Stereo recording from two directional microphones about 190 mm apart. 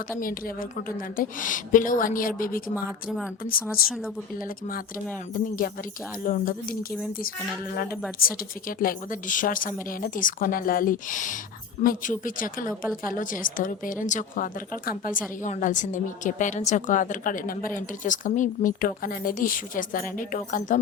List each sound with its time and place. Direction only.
0.2 s a woman's voice: 50° left (ahead or behind)
3.8 s speech: centre (ahead or behind)
5.3 s a woman's voice: 50° left (ahead or behind)
8.2 s a woman's voice: 50° left (ahead or behind)